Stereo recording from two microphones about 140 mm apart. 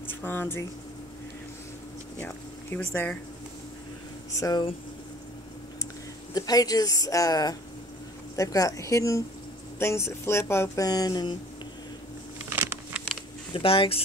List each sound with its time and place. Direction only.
0.1 s speech: 15° left (ahead or behind)
2.1 s speech: 15° left (ahead or behind)
4.4 s speech: 30° left (ahead or behind)
6.3 s speech: 25° left (ahead or behind)
12.4 s a sound: 15° right (ahead or behind)
13.5 s speech: 40° left (ahead or behind)